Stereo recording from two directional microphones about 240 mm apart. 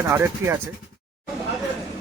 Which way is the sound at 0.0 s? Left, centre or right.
Centre.